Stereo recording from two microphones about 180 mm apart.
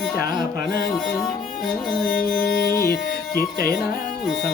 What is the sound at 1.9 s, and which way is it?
Music, 55° left (ahead or behind).